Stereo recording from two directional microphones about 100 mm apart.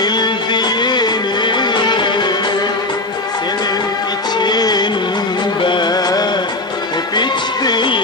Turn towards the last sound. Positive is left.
turn(degrees=50)  # may be behind; listen again after turning